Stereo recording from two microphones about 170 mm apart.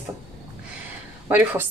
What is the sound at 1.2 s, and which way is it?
Speech, 10° right (ahead or behind).